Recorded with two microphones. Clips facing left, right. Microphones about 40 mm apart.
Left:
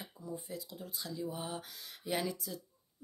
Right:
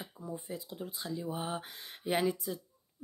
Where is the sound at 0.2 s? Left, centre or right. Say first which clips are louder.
Right 2 dB; right.